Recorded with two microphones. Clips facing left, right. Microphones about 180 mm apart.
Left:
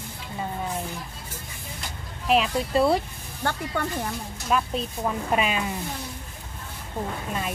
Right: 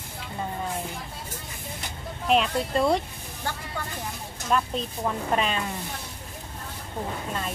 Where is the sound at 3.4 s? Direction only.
65° left (ahead or behind).